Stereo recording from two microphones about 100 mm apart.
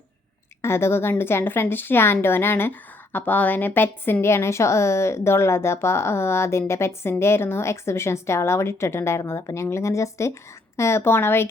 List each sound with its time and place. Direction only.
0.6 s speech: 25° left (ahead or behind)